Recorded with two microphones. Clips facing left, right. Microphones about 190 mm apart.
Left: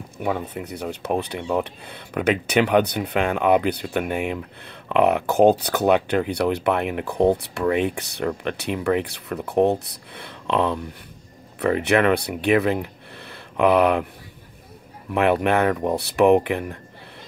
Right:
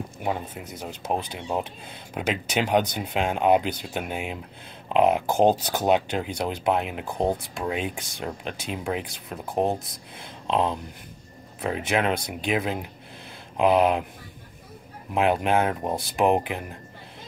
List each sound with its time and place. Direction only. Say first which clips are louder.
0.2 s speech: left 5 dB; 60° left (ahead or behind)
15.1 s speech: left 3 dB; 65° left (ahead or behind)